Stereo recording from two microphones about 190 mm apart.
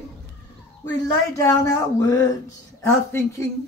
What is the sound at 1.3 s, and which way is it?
Speech, 15° left (ahead or behind).